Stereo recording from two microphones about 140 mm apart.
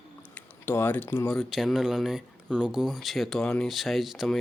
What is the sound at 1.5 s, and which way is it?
Speech, centre (ahead or behind).